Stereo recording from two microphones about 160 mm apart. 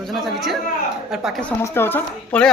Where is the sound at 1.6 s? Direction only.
15° left (ahead or behind).